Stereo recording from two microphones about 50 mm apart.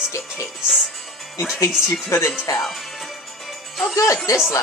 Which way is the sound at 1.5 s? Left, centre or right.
Left.